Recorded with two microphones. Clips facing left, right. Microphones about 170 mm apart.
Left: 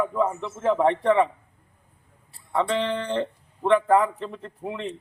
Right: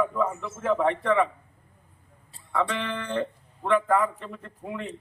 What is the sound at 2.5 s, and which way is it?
A man's voice, 30° left (ahead or behind).